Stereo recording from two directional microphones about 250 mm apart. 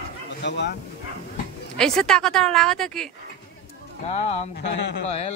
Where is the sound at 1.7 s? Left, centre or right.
Centre.